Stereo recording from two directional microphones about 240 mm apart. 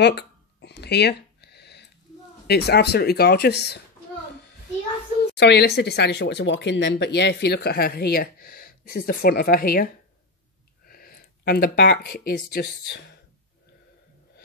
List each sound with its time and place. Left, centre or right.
0.0 s a sound: left
2.4 s speech: left
5.4 s speech: left
10.9 s speech: left